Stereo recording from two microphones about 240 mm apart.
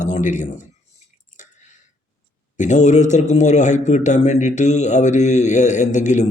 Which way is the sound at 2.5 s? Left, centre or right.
Left.